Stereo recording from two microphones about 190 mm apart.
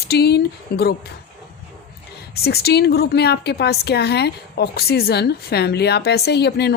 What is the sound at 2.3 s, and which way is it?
A woman's voice, 55° left (ahead or behind).